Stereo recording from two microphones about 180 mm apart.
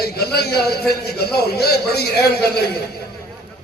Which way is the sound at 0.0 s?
60° left (ahead or behind).